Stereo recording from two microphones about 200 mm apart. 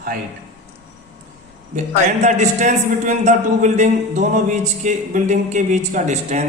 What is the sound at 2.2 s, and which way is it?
A man's voice, 35° right (ahead or behind).